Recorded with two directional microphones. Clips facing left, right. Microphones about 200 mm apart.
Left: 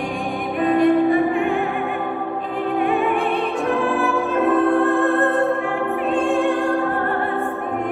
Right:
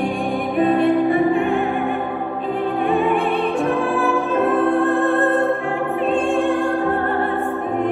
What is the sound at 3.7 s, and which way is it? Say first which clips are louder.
Music: right 1 dB; centre (ahead or behind).